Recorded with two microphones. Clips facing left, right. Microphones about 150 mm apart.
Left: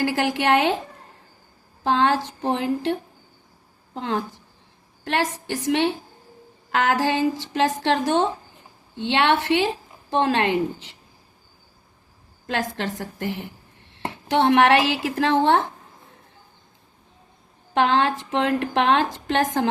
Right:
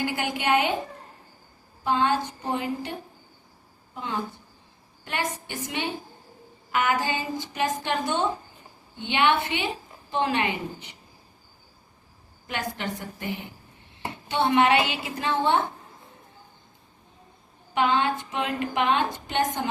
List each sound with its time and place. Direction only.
0.0 s a woman's voice: 90° left
1.8 s a woman's voice: 90° left
3.9 s a woman's voice: 90° left
12.5 s a woman's voice: 90° left
17.7 s a woman's voice: 90° left